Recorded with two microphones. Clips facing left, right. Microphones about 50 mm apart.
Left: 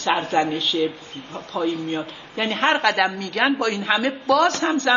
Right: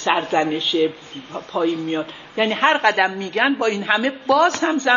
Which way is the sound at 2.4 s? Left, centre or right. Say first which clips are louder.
Right 5 dB; centre.